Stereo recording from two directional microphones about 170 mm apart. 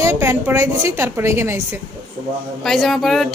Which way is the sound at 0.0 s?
15° right (ahead or behind).